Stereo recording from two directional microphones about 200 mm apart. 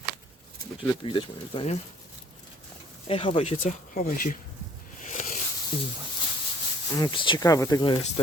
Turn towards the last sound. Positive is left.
turn(degrees=20)  # may be behind; listen again after turning